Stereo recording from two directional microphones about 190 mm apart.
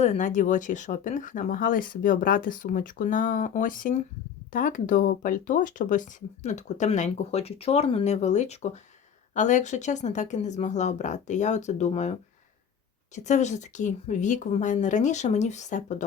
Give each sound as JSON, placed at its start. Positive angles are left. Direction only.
{"t": 0.0, "sound": "speech", "side_deg": 40}
{"t": 13.1, "sound": "speech", "side_deg": 40}